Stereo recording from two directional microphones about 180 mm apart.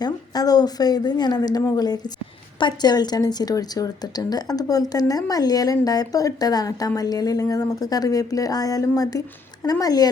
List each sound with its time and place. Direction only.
0.0 s a woman's voice: 20° left (ahead or behind)